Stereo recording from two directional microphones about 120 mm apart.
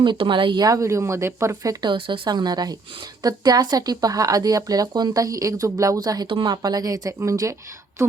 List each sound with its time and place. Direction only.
0.0 s speech: 40° right (ahead or behind); by 1.7 s 25° right (ahead or behind)
1.8 s speech: 40° right (ahead or behind); by 7.5 s 25° right (ahead or behind)